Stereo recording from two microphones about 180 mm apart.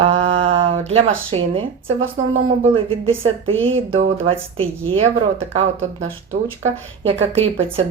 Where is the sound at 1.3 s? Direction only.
30° right (ahead or behind).